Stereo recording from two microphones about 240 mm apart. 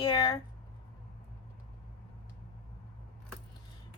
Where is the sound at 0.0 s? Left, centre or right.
Centre.